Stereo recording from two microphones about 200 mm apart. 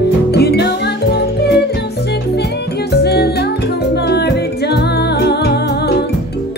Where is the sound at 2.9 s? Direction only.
55° left (ahead or behind).